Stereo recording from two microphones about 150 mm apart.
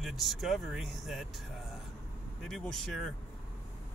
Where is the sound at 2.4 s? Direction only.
5° left (ahead or behind).